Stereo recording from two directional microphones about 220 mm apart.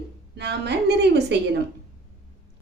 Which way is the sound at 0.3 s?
50° right (ahead or behind).